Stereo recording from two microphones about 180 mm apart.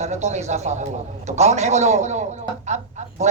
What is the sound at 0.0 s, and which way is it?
A man's voice, 40° right (ahead or behind).